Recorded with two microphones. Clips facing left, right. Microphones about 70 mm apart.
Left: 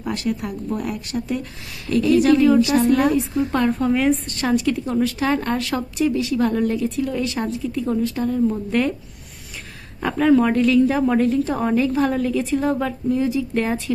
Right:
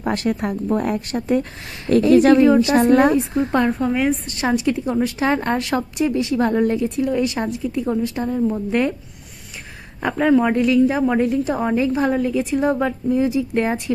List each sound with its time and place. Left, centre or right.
0.0 s a woman's voice: right
3.7 s a woman's voice: centre
4.4 s a woman's voice: right
10.0 s a woman's voice: centre